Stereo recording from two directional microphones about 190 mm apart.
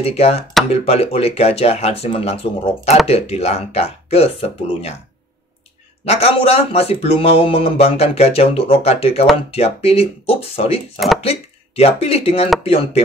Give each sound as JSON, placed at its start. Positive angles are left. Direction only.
{"t": 0.0, "sound": "speech", "side_deg": 30}
{"t": 6.0, "sound": "speech", "side_deg": 30}